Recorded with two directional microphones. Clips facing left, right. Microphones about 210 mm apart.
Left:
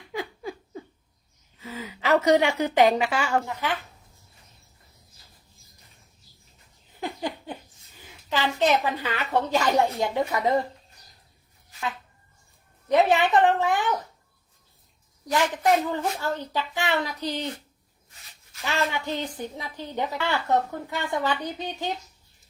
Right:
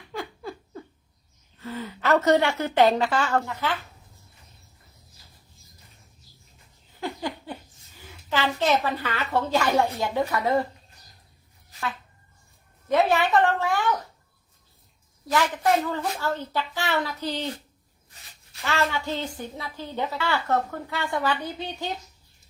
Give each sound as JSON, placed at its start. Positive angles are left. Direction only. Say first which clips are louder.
{"t": 0.1, "sound": "a sound", "louder": "left 2 dB", "side_deg": 15}
{"t": 1.5, "sound": "a woman's voice", "louder": "right 3 dB", "side_deg": 10}
{"t": 6.9, "sound": "a sound", "louder": "even", "side_deg": 15}
{"t": 7.9, "sound": "a woman's voice", "louder": "right 1 dB", "side_deg": 15}
{"t": 12.9, "sound": "a woman's voice", "louder": "left 1 dB", "side_deg": 20}
{"t": 15.9, "sound": "a woman's voice", "louder": "even", "side_deg": 15}
{"t": 18.6, "sound": "a woman's voice", "louder": "right 1 dB", "side_deg": 15}